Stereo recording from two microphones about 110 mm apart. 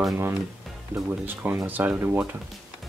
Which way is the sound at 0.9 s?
20° right (ahead or behind).